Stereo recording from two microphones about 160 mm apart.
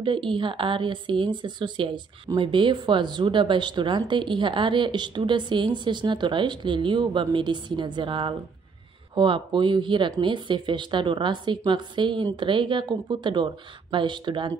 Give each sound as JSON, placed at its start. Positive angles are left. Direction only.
{"t": 0.0, "sound": "a woman's voice", "side_deg": -30}